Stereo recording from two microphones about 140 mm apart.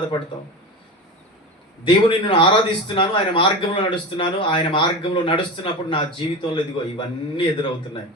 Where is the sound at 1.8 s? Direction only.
35° left (ahead or behind).